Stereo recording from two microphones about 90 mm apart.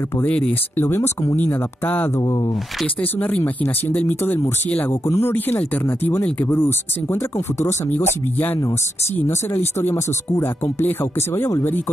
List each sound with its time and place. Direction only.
0.2 s speech: 15° left (ahead or behind)
2.1 s speech: 40° left (ahead or behind)
3.0 s speech: 20° left (ahead or behind)